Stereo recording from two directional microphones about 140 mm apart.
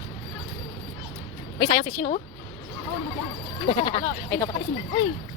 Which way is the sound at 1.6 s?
45° left (ahead or behind).